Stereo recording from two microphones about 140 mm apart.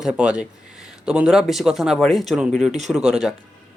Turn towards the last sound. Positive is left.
turn(degrees=-5)  # may be behind; listen again after turning